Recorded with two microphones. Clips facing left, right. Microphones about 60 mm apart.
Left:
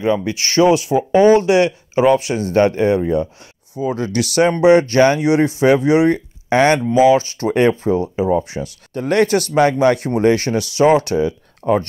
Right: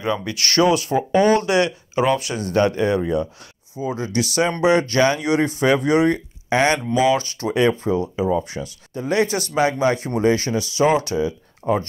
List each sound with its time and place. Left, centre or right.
0.0 s speech: left
3.8 s speech: left
4.6 s speech: left
6.1 s speech: left
8.9 s speech: left
11.6 s speech: left